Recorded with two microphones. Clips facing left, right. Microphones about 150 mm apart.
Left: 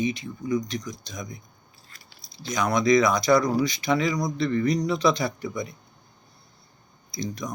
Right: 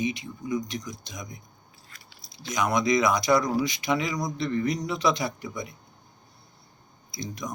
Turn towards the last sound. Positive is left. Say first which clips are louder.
# left 3 dB
turn(degrees=-10)  # may be behind; listen again after turning